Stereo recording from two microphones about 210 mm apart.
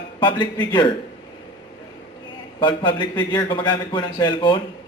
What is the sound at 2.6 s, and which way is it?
A man's voice, 25° left (ahead or behind).